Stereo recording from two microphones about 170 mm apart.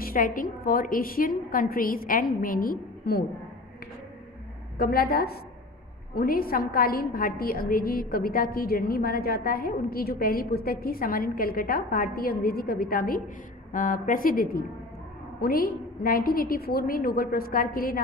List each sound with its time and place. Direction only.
0.0 s a woman's voice: 55° left (ahead or behind)
4.7 s a woman's voice: 60° left (ahead or behind)